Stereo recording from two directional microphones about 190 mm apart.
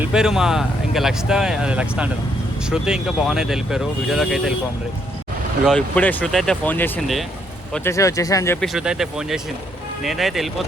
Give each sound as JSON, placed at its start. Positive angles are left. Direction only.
{"t": 0.0, "sound": "speech", "side_deg": -5}
{"t": 5.6, "sound": "speech", "side_deg": 5}
{"t": 8.6, "sound": "speech", "side_deg": -5}